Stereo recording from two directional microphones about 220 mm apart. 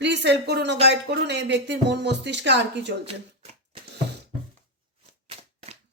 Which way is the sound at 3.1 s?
30° right (ahead or behind).